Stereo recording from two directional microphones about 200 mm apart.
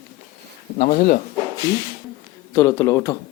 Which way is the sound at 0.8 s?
40° left (ahead or behind).